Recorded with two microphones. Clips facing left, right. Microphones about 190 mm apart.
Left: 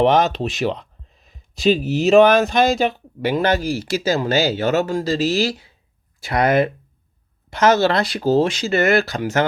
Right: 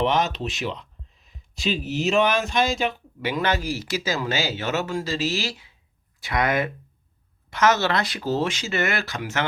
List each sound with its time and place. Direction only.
0.0 s speech: 40° left (ahead or behind)